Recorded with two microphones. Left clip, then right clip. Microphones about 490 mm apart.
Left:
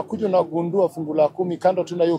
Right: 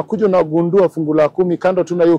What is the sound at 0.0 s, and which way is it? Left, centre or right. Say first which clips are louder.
A man's voice: right 6 dB; right.